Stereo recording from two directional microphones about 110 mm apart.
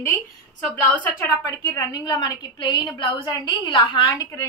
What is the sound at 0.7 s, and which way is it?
Speech, 15° left (ahead or behind).